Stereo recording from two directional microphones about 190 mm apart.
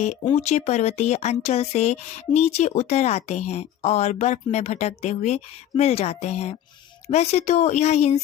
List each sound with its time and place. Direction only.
0.0 s speech: 35° left (ahead or behind)